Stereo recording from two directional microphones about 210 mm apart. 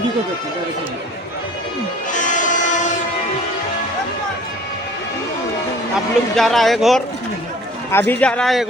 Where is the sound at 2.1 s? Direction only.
35° left (ahead or behind).